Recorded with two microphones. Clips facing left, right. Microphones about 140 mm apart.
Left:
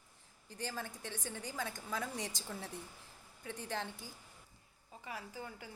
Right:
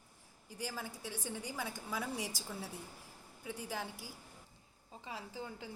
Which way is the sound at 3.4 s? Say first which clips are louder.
Even; 10° right (ahead or behind).